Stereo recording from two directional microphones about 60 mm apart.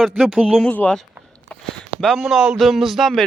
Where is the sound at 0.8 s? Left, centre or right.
Left.